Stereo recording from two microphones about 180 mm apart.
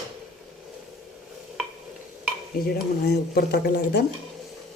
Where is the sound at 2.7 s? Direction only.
65° left (ahead or behind).